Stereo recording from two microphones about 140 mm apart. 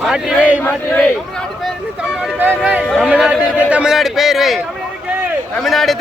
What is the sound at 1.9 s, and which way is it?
Speech, 5° right (ahead or behind).